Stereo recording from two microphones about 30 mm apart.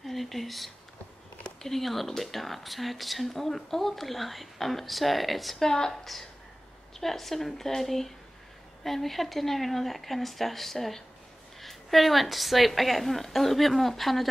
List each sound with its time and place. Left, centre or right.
0.0 s a sound: centre
1.6 s speech: centre
5.6 s speech: centre
7.0 s speech: centre